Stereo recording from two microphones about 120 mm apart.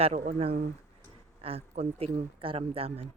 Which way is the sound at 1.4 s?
55° right (ahead or behind).